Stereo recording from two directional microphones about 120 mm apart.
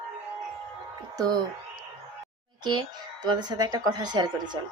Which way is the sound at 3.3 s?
35° right (ahead or behind).